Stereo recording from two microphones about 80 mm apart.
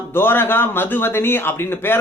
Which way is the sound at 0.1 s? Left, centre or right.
Left.